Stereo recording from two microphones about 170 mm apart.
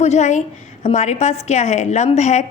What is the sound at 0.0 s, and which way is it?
A woman's voice, 40° left (ahead or behind).